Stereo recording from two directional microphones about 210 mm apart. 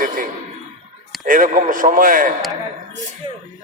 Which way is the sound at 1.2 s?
40° right (ahead or behind).